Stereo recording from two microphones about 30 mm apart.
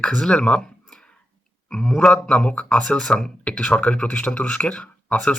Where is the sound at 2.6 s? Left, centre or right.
Left.